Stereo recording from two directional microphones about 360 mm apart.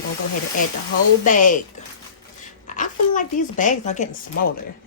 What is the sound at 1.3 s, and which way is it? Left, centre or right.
Speech, left.